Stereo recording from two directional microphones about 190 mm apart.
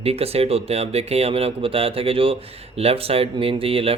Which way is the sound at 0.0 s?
30° right (ahead or behind).